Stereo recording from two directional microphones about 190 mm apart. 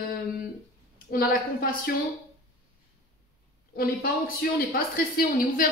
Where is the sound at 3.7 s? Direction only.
50° left (ahead or behind).